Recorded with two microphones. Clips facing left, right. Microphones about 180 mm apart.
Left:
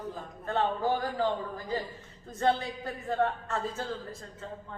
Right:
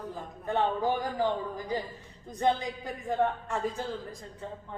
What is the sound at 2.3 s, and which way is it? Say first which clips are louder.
A woman's voice: even; 15° right (ahead or behind).